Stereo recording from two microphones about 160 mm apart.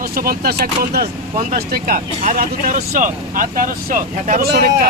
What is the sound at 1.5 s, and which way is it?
Speech, 65° right (ahead or behind).